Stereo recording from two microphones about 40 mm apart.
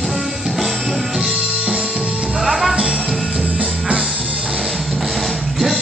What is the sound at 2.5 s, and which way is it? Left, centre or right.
Music, centre.